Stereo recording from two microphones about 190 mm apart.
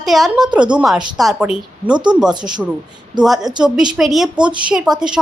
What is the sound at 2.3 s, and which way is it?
Speech, 25° right (ahead or behind).